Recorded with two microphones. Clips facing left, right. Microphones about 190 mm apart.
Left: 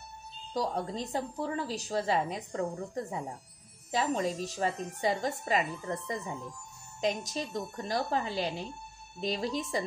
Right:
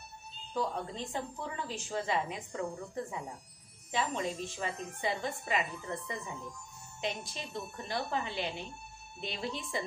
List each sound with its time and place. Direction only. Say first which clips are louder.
0.5 s a woman's voice: left 3 dB; 35° left (ahead or behind)